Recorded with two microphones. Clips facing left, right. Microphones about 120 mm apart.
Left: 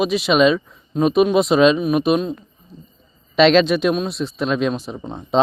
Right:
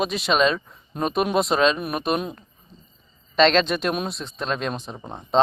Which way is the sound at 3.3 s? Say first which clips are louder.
Left 5 dB; 10° left (ahead or behind).